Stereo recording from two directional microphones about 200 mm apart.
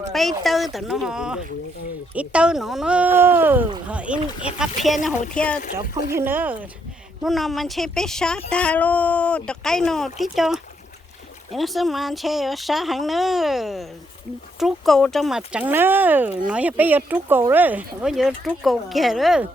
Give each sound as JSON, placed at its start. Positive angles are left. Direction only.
{"t": 0.1, "sound": "speech", "side_deg": 0}
{"t": 6.1, "sound": "speech", "side_deg": -10}